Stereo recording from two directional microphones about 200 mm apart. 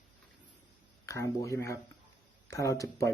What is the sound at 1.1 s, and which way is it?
Speech, 15° left (ahead or behind).